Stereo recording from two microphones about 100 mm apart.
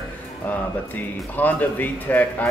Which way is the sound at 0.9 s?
15° left (ahead or behind).